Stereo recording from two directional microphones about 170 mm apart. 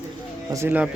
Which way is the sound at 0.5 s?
10° right (ahead or behind).